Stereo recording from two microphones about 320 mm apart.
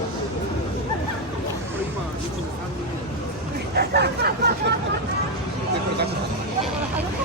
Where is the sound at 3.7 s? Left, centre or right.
Right.